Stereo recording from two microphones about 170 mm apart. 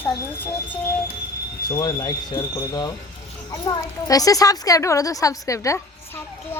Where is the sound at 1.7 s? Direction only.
20° left (ahead or behind).